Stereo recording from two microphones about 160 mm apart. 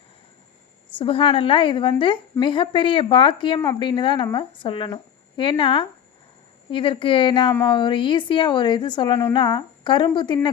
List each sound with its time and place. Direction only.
0.9 s a woman's voice: 35° left (ahead or behind)